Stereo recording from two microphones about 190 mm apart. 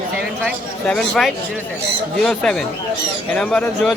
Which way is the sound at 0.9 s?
5° left (ahead or behind).